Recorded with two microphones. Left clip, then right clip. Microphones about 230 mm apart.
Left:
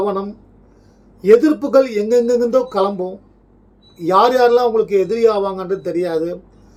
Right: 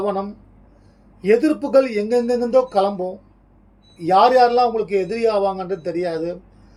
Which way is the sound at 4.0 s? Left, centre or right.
Centre.